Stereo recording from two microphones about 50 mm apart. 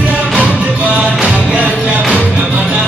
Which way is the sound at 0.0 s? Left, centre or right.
Right.